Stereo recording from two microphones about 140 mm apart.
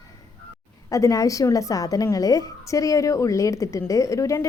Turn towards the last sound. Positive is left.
turn(degrees=20)  # may be behind; listen again after turning